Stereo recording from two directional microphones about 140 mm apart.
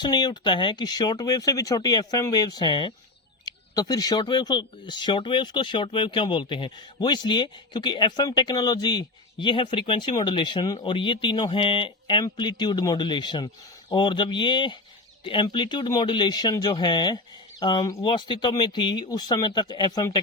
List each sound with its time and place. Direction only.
0.0 s speech: 30° left (ahead or behind)